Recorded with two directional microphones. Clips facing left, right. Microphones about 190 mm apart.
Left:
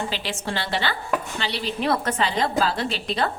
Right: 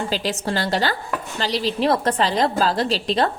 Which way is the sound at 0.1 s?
40° right (ahead or behind).